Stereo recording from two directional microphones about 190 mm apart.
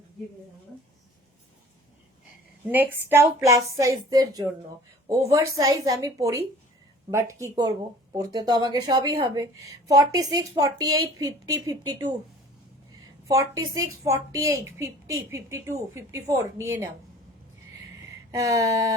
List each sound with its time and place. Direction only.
2.6 s a woman's voice: 10° right (ahead or behind)
13.2 s a woman's voice: 15° right (ahead or behind)
18.3 s a woman's voice: 20° right (ahead or behind)